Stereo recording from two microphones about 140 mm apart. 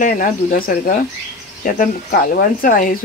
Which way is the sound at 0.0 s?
70° left (ahead or behind).